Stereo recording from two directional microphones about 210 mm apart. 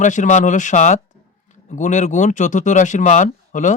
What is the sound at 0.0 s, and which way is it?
Speech, 35° left (ahead or behind).